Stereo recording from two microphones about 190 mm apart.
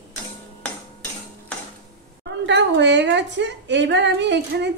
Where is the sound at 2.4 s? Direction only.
65° right (ahead or behind).